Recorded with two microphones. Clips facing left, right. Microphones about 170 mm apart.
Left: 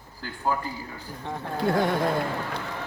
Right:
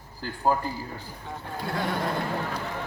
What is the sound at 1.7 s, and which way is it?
Speech, 50° left (ahead or behind).